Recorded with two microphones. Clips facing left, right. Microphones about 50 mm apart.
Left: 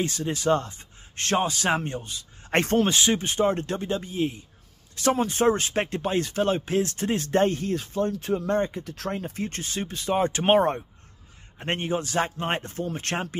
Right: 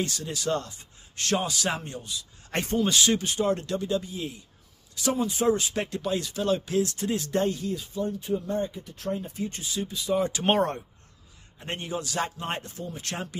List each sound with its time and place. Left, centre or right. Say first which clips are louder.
0.0 s speech: left 4 dB; left
2.6 s speech: left 3 dB; left
2.9 s a man's voice: left 1 dB; left
4.9 s speech: left 4 dB; left
10.4 s speech: left 5 dB; centre
11.5 s a man's voice: left 5 dB; left